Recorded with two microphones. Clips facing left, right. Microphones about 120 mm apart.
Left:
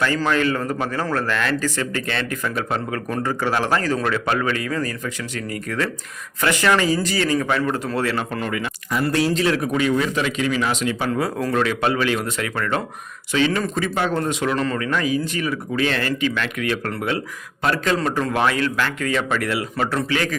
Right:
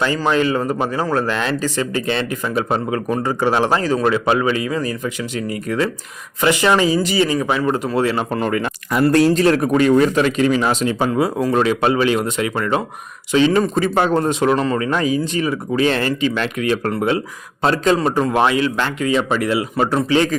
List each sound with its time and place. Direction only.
0.3 s speech: 20° right (ahead or behind)
8.9 s speech: 60° right (ahead or behind); by 10.9 s 35° right (ahead or behind)
11.0 s a man's voice: 15° right (ahead or behind)